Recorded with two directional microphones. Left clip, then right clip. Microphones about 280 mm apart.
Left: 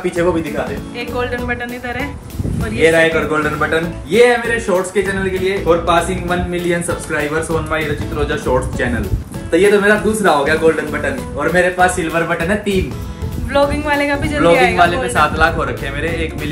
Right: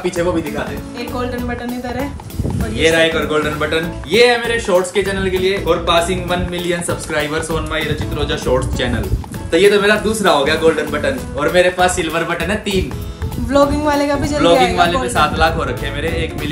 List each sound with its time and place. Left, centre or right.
0.2 s a man's voice: centre
3.0 s a man's voice: centre
13.5 s speech: centre
14.7 s a man's voice: centre